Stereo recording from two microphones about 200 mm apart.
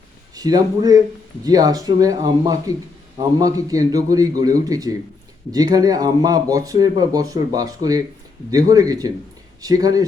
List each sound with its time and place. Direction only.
0.3 s a man's voice: 20° right (ahead or behind)